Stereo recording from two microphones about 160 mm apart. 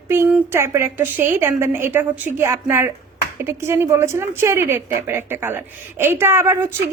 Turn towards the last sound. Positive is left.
turn(degrees=-15)  # may be behind; listen again after turning